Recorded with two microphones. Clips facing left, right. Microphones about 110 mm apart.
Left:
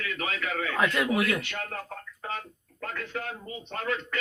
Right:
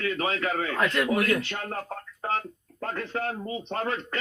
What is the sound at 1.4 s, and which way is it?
Speech, 35° right (ahead or behind).